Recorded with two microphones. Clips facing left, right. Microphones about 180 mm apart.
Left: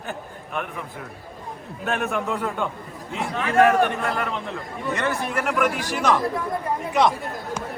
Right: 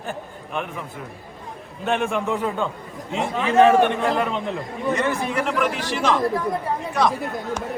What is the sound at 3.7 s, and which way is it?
A man's voice, centre (ahead or behind).